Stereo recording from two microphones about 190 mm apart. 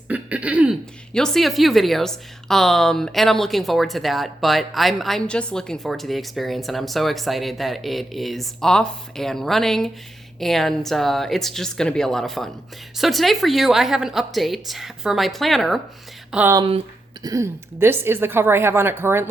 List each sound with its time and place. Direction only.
0.1 s a woman's voice: 5° right (ahead or behind)
16.6 s speech: 30° right (ahead or behind)
17.2 s a woman's voice: 15° right (ahead or behind)